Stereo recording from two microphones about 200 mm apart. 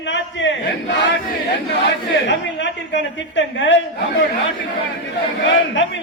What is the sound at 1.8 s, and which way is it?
A woman's voice, 60° left (ahead or behind).